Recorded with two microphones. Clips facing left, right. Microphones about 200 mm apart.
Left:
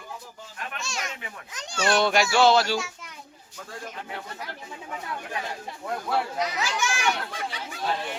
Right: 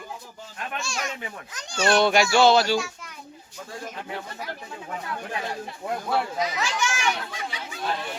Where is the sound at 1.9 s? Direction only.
Centre (ahead or behind).